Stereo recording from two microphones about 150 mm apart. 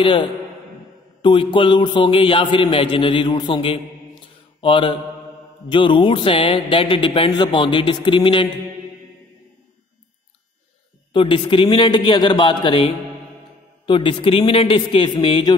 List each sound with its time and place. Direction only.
0.0 s speech: 35° left (ahead or behind)
4.6 s mantra: 35° left (ahead or behind)
5.7 s speech: 35° left (ahead or behind)
11.1 s speech: 35° left (ahead or behind)